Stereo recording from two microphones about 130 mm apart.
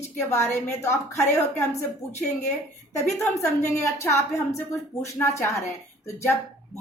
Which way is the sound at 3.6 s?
20° left (ahead or behind).